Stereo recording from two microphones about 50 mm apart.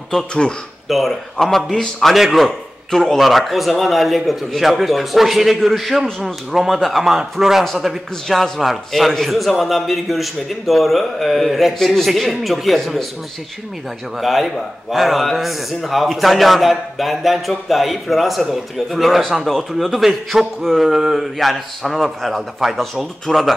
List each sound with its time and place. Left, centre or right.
0.1 s speech: centre
0.8 s a man's voice: centre
2.1 s a man's voice: centre
14.1 s a man's voice: centre